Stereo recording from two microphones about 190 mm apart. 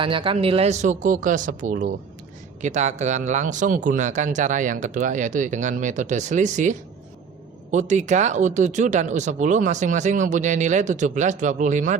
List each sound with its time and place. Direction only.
0.0 s speech: 25° right (ahead or behind)